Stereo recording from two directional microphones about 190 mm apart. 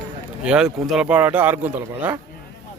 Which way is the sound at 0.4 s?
5° right (ahead or behind).